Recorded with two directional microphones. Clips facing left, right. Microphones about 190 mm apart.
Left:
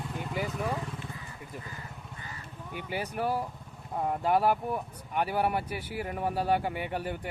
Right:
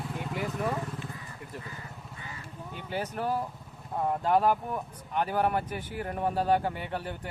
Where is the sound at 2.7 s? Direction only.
10° left (ahead or behind).